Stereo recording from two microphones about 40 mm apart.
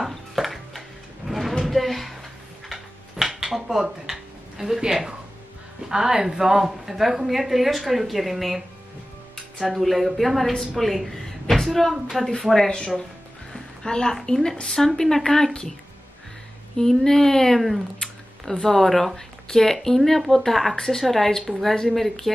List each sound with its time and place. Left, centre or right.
0.0 s music: centre
1.6 s a sound: centre
2.7 s dishes: centre
5.9 s a woman's voice: centre
9.7 s a woman's voice: centre
16.7 s speech: centre
17.6 s a woman's voice: centre